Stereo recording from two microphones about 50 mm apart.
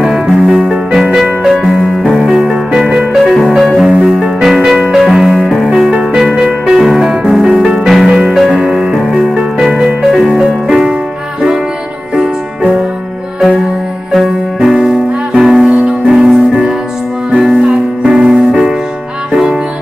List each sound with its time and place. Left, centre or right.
0.0 s music: centre
3.2 s music: centre
3.8 s music: centre
9.6 s music: centre
14.1 s music: centre